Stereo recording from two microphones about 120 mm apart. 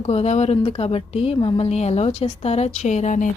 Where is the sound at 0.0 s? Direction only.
60° left (ahead or behind).